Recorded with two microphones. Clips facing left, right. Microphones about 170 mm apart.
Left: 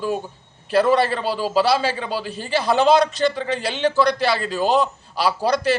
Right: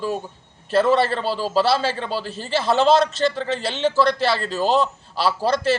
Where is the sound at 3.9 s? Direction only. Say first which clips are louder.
Even; centre (ahead or behind).